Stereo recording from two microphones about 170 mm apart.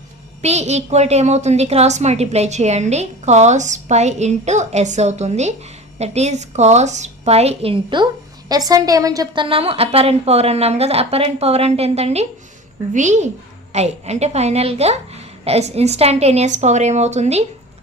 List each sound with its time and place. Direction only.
0.4 s a woman's voice: 40° right (ahead or behind)